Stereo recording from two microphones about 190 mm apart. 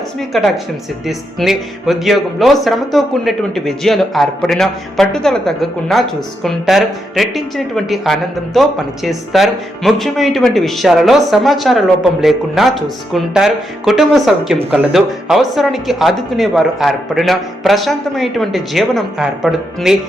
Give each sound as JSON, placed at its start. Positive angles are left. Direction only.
{"t": 0.3, "sound": "speech", "side_deg": 0}